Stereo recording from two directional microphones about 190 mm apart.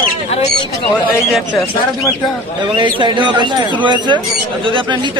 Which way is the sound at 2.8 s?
25° right (ahead or behind).